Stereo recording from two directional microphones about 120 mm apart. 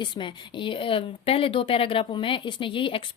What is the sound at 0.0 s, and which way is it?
A woman's voice, 40° left (ahead or behind).